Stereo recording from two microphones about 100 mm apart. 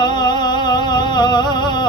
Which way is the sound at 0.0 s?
45° left (ahead or behind).